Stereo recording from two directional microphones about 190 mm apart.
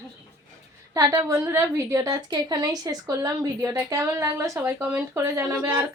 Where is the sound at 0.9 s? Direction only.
20° right (ahead or behind).